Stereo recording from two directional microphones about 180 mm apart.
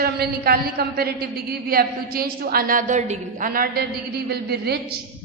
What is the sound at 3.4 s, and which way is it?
A woman's voice, 55° right (ahead or behind).